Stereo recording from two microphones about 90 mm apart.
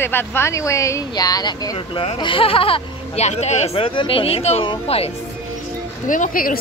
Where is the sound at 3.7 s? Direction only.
75° left (ahead or behind).